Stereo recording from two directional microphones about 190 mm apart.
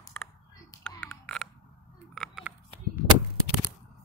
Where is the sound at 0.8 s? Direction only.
5° left (ahead or behind).